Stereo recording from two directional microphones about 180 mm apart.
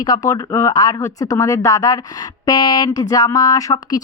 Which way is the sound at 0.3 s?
20° left (ahead or behind).